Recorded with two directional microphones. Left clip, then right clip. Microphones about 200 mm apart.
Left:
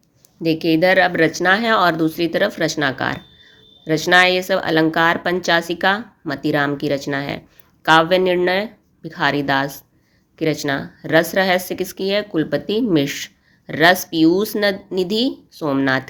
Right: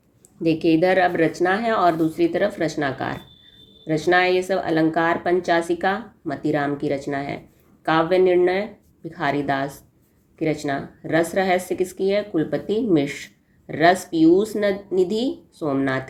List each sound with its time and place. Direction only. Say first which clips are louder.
0.4 s speech: left 3 dB; 15° left (ahead or behind)